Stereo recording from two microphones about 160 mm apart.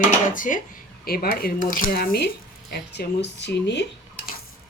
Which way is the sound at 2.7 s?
90° left.